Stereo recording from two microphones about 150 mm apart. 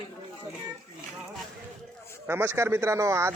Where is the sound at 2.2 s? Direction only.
15° right (ahead or behind).